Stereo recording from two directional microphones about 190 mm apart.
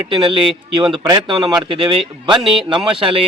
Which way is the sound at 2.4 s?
Centre (ahead or behind).